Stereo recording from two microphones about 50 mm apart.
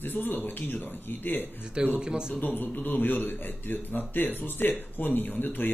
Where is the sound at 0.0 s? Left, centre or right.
Left.